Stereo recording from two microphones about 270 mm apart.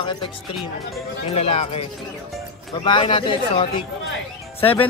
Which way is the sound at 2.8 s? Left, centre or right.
Centre.